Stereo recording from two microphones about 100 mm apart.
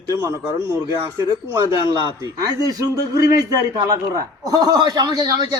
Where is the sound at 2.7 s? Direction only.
35° right (ahead or behind).